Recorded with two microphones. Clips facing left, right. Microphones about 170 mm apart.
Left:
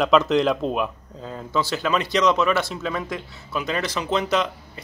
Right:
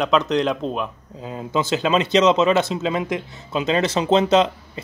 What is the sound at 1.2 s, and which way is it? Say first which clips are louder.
Speech: right 2 dB; 15° right (ahead or behind).